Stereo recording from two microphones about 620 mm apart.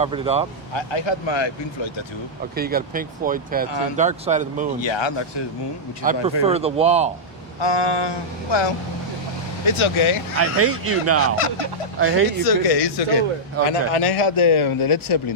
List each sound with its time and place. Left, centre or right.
0.0 s speech: centre
0.7 s a man's voice: left
2.6 s speech: centre
4.8 s a man's voice: left
6.0 s speech: centre
7.6 s a sound: left
9.6 s a man's voice: left
10.3 s speech: right
11.3 s a man's voice: left
11.9 s speech: centre
12.4 s a man's voice: left